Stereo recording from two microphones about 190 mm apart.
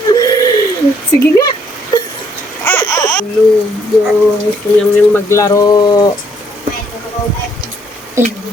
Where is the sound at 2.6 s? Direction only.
10° left (ahead or behind).